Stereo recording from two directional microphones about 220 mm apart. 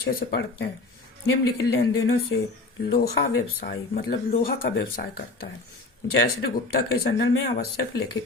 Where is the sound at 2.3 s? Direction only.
55° left (ahead or behind).